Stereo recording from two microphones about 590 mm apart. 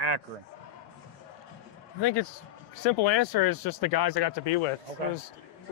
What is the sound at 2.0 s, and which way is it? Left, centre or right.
Speech, left.